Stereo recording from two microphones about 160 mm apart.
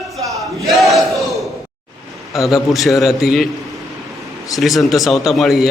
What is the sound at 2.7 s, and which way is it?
Speech, centre (ahead or behind).